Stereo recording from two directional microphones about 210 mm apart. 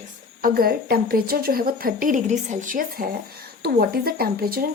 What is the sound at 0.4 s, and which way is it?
A woman's voice, 45° right (ahead or behind).